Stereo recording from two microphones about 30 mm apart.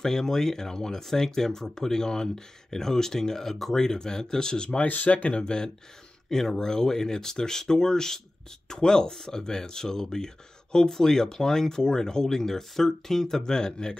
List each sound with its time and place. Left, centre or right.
0.0 s speech: centre
4.8 s speech: left
5.1 s speech: left
5.4 s speech: left
6.3 s speech: centre
9.1 s speech: centre